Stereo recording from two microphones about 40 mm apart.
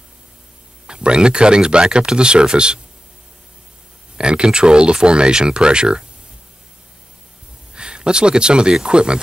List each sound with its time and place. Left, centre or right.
0.8 s speech: right
4.2 s speech: right
7.7 s speech: right